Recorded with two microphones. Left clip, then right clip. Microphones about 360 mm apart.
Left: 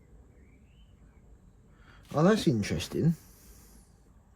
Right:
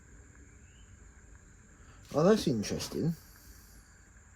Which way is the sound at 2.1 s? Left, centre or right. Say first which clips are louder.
Left 1 dB; left.